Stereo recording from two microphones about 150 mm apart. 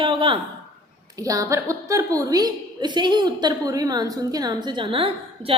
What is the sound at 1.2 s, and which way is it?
A woman's voice, 25° right (ahead or behind).